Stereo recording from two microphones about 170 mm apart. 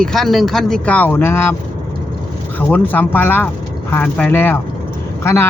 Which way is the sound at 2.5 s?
10° left (ahead or behind).